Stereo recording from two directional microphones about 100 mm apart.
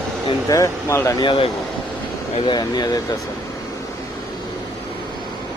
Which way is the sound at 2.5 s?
45° left (ahead or behind).